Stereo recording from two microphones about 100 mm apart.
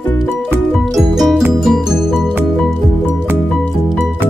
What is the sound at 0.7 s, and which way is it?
Music, centre (ahead or behind).